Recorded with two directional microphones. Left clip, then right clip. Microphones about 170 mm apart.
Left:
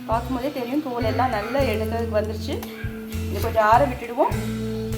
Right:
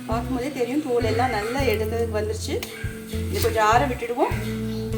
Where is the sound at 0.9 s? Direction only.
5° left (ahead or behind).